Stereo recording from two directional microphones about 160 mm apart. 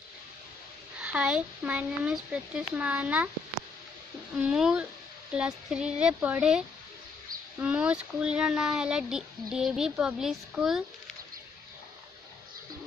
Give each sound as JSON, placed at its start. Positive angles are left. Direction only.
{"t": 1.0, "sound": "speech", "side_deg": -5}
{"t": 4.4, "sound": "speech", "side_deg": -5}